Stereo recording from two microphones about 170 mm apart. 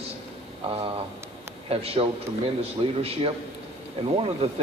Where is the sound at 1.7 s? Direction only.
35° right (ahead or behind).